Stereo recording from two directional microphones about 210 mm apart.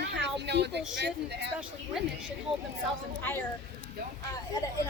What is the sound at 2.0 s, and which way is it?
Speech, centre (ahead or behind).